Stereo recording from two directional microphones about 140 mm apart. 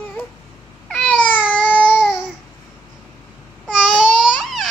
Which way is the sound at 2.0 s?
5° right (ahead or behind).